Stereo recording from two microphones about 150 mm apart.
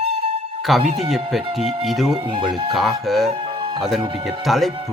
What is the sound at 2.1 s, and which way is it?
Speech, 35° right (ahead or behind).